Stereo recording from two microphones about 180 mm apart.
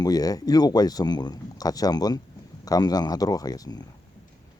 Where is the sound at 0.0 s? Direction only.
20° left (ahead or behind).